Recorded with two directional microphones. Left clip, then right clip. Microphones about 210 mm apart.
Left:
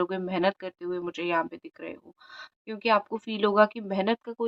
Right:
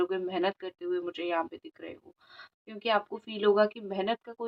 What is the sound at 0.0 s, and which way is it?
Speech, 40° left (ahead or behind).